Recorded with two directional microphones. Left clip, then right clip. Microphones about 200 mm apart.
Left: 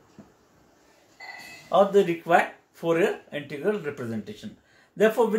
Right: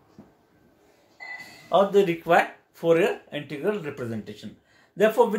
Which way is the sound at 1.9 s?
20° right (ahead or behind).